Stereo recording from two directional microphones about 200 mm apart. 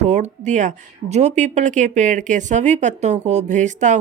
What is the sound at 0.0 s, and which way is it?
Speech, 35° right (ahead or behind).